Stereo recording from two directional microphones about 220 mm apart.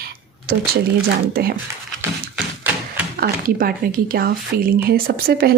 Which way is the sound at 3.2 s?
40° right (ahead or behind).